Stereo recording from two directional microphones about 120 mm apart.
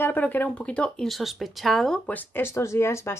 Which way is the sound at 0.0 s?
15° left (ahead or behind).